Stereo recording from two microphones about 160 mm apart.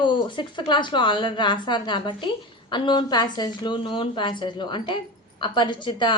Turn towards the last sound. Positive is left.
turn(degrees=30)  # may be behind; listen again after turning